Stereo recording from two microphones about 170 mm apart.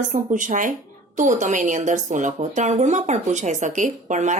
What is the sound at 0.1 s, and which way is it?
Speech, 50° right (ahead or behind).